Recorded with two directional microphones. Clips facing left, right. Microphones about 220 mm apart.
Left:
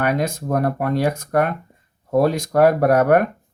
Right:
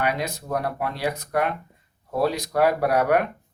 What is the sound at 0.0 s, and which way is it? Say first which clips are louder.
Speech: left 5 dB; 50° left (ahead or behind).